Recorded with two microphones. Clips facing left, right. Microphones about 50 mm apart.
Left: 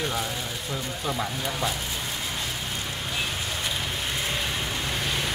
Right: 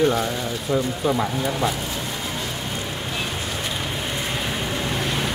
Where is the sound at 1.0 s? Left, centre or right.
Centre.